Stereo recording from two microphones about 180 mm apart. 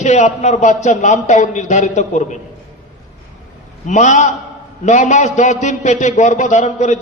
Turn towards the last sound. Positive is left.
turn(degrees=40)  # may be behind; listen again after turning